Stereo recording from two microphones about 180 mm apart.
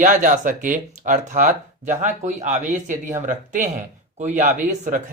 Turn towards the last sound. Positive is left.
turn(degrees=-45)  # may be behind; listen again after turning